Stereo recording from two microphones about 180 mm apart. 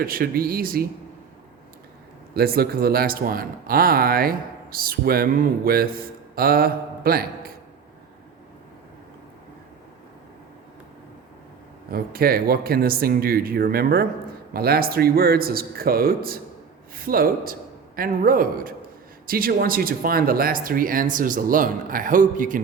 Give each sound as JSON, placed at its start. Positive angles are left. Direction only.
{"t": 0.0, "sound": "speech", "side_deg": -55}
{"t": 2.3, "sound": "speech", "side_deg": -60}
{"t": 11.9, "sound": "a man's voice", "side_deg": -55}